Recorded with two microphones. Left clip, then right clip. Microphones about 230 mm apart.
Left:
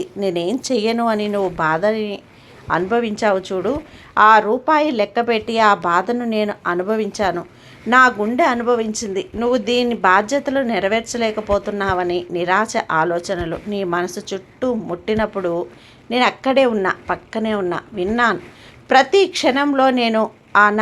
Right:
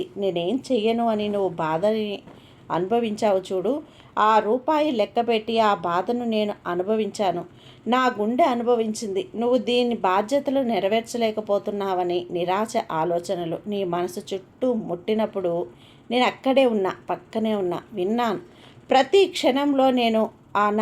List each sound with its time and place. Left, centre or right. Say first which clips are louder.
0.0 s a woman's voice: left 4 dB; centre